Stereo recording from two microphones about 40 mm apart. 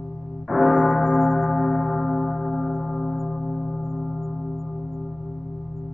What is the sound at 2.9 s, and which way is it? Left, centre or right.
Gong, left.